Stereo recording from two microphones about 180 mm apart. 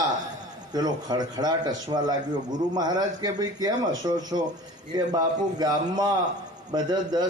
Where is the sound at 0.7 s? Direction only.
20° right (ahead or behind).